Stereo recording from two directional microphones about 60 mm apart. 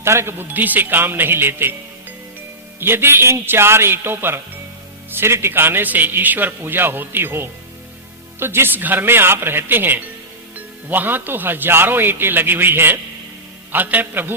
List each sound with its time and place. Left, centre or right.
0.0 s a man's voice: right
2.8 s a man's voice: right